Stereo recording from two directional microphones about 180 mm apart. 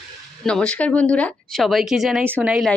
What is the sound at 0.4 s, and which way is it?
Speech, 5° left (ahead or behind).